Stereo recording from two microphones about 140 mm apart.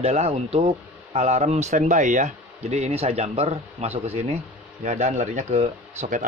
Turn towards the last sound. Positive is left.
turn(degrees=-55)  # may be behind; listen again after turning